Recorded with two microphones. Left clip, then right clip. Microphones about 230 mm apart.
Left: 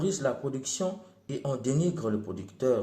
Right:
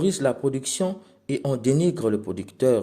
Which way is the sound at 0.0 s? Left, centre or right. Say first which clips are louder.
Right 7 dB; right.